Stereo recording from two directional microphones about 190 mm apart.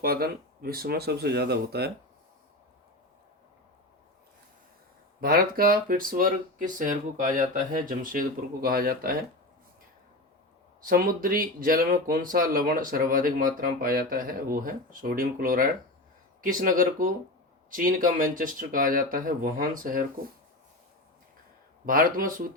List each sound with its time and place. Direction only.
0.0 s speech: 55° right (ahead or behind)
5.2 s speech: 50° right (ahead or behind)
10.8 s speech: 50° right (ahead or behind)
21.8 s speech: 45° right (ahead or behind)